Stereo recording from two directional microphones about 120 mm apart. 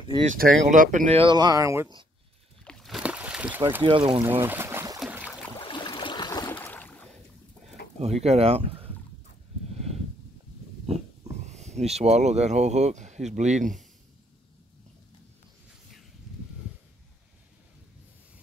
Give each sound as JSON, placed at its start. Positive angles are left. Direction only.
{"t": 0.3, "sound": "speech", "side_deg": -90}
{"t": 1.1, "sound": "speech", "side_deg": -40}
{"t": 2.6, "sound": "a sound", "side_deg": 5}
{"t": 3.0, "sound": "a sound", "side_deg": -10}
{"t": 3.8, "sound": "speech", "side_deg": -45}
{"t": 4.2, "sound": "speech", "side_deg": -20}
{"t": 5.1, "sound": "boat", "side_deg": -10}
{"t": 5.6, "sound": "boat", "side_deg": 40}
{"t": 6.5, "sound": "boat", "side_deg": 15}
{"t": 7.6, "sound": "speech", "side_deg": -65}
{"t": 11.4, "sound": "speech", "side_deg": -70}